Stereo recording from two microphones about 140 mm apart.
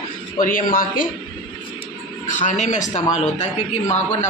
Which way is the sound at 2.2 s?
60° left (ahead or behind).